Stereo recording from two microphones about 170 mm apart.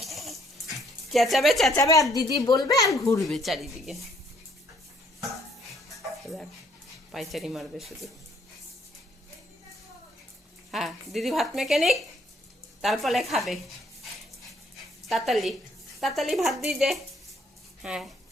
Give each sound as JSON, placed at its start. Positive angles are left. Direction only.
{"t": 0.0, "sound": "bathtub", "side_deg": 0}
{"t": 0.8, "sound": "speech", "side_deg": 0}
{"t": 1.7, "sound": "speech", "side_deg": 20}
{"t": 3.2, "sound": "speech", "side_deg": 0}
{"t": 5.9, "sound": "music", "side_deg": 0}
{"t": 7.1, "sound": "speech", "side_deg": 0}
{"t": 10.7, "sound": "speech", "side_deg": 0}
{"t": 15.0, "sound": "speech", "side_deg": 0}